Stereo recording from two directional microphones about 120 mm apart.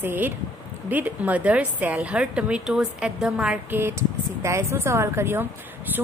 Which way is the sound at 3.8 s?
20° right (ahead or behind).